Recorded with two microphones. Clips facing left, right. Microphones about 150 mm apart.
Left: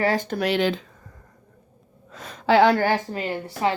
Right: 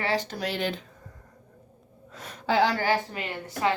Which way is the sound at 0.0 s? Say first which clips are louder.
Left 6 dB; 45° left (ahead or behind).